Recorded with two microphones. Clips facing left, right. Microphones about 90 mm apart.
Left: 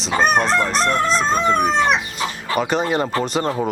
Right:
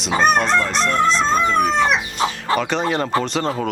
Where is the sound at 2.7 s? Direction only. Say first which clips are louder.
Even; 5° left (ahead or behind).